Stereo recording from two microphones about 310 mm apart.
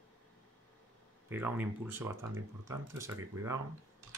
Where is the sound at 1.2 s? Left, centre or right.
Centre.